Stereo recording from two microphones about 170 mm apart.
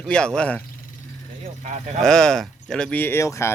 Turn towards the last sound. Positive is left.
turn(degrees=15)  # may be behind; listen again after turning